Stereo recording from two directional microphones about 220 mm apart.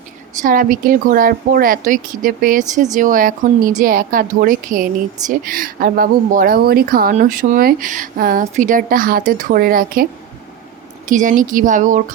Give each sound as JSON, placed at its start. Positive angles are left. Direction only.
{"t": 0.4, "sound": "speech", "side_deg": -40}